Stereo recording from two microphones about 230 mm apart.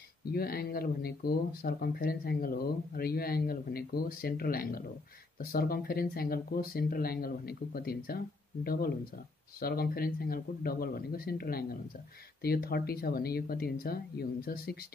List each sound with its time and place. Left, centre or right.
0.3 s speech: left